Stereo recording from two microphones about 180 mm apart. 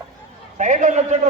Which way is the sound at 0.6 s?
40° right (ahead or behind).